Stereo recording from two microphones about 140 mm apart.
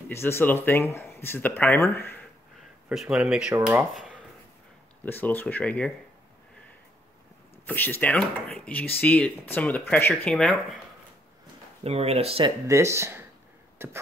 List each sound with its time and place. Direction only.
0.1 s speech: 15° left (ahead or behind)
2.9 s speech: 5° right (ahead or behind)
5.0 s speech: 15° left (ahead or behind)
7.6 s speech: 15° left (ahead or behind)
11.8 s speech: 50° right (ahead or behind)
12.6 s speech: 20° right (ahead or behind)
13.8 s beatboxing: 15° right (ahead or behind)